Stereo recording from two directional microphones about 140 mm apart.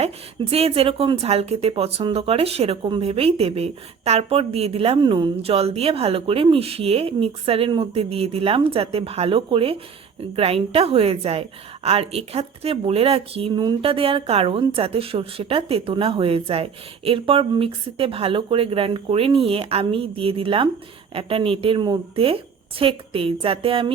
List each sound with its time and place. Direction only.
0.5 s a woman's voice: 45° right (ahead or behind)